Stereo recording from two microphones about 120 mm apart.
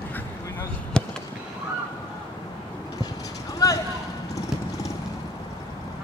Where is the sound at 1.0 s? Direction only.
5° left (ahead or behind).